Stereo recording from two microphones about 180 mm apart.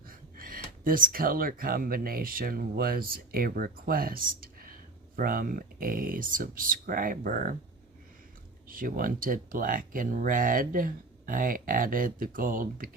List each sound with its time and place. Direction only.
0.1 s speech: 55° right (ahead or behind)
8.6 s speech: 50° right (ahead or behind)